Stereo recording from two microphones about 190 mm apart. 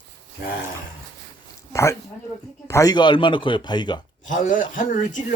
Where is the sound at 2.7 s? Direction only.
20° left (ahead or behind).